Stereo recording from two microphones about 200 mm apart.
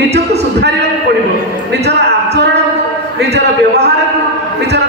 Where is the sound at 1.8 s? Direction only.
55° right (ahead or behind).